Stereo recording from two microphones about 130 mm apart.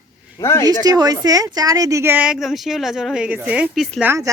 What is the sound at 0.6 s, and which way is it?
A woman's voice, 30° right (ahead or behind).